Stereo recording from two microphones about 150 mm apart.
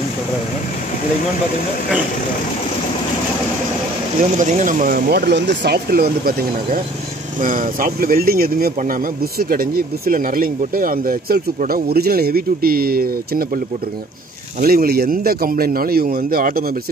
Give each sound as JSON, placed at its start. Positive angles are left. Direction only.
{"t": 4.2, "sound": "speech", "side_deg": -60}
{"t": 7.3, "sound": "speech", "side_deg": -65}
{"t": 14.6, "sound": "a man's voice", "side_deg": -90}